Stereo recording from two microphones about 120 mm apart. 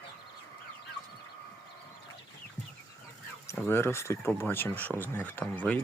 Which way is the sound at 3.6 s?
20° left (ahead or behind).